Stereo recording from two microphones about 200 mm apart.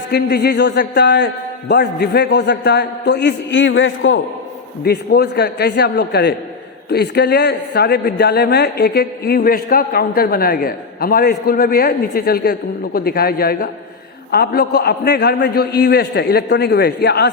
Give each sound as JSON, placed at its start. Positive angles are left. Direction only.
{"t": 0.1, "sound": "a man's voice", "side_deg": 50}
{"t": 4.8, "sound": "a man's voice", "side_deg": 55}